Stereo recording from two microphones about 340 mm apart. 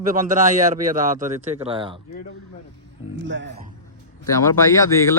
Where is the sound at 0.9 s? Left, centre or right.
Right.